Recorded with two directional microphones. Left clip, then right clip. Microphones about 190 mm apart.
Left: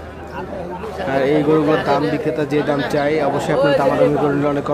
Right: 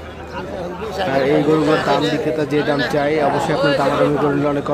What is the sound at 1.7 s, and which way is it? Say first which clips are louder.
Speech: even; 45° right (ahead or behind).